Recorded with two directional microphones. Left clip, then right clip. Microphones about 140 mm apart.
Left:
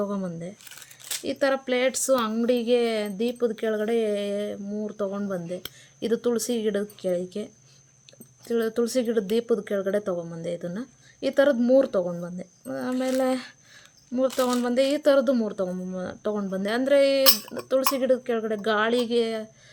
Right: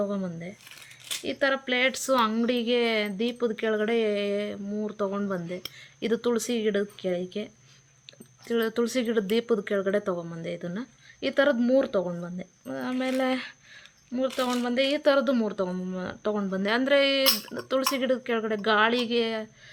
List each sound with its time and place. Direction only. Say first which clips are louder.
0.0 s speech: left 1 dB; 40° left (ahead or behind)
8.4 s speech: left 1 dB; 20° left (ahead or behind)